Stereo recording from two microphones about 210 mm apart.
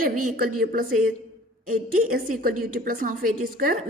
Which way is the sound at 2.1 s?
45° right (ahead or behind).